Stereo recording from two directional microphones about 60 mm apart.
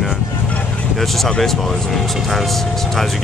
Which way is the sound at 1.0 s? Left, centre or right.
Centre.